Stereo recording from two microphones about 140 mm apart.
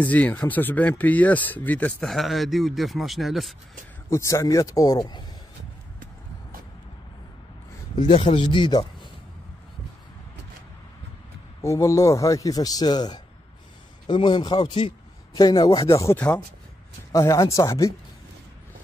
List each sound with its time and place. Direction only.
0.0 s speech: 10° left (ahead or behind)
4.1 s a man's voice: 20° left (ahead or behind)
8.0 s speech: 50° left (ahead or behind)
8.4 s speech: 35° left (ahead or behind)
11.6 s a man's voice: 20° left (ahead or behind)
16.0 s a man's voice: 15° left (ahead or behind)